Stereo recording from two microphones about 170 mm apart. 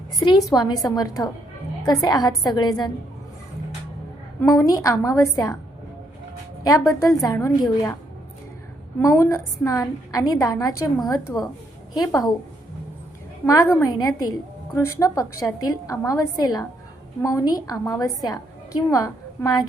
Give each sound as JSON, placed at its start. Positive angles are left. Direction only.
{"t": 0.5, "sound": "a woman's voice", "side_deg": 20}
{"t": 4.4, "sound": "a woman's voice", "side_deg": 20}
{"t": 6.7, "sound": "a woman's voice", "side_deg": 20}
{"t": 9.0, "sound": "a woman's voice", "side_deg": 20}
{"t": 13.4, "sound": "a woman's voice", "side_deg": 20}